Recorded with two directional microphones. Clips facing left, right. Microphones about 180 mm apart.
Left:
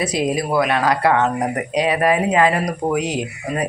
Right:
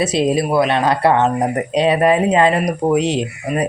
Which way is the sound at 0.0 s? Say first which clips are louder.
Right 4 dB; 25° right (ahead or behind).